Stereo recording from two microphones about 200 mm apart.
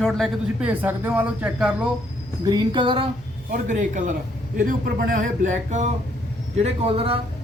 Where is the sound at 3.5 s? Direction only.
40° right (ahead or behind).